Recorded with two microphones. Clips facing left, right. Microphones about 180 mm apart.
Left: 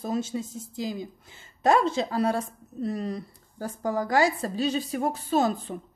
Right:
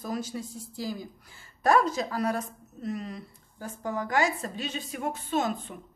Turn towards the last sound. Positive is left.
turn(degrees=35)  # may be behind; listen again after turning